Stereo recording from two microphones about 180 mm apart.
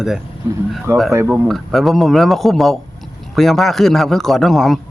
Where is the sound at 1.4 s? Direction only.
Centre (ahead or behind).